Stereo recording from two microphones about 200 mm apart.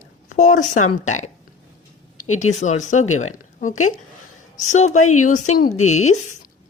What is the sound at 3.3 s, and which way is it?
A woman's voice, 40° left (ahead or behind).